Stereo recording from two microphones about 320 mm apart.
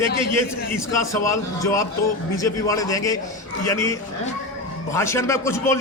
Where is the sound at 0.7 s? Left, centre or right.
Centre.